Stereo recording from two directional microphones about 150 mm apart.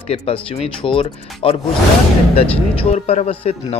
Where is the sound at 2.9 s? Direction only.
45° left (ahead or behind).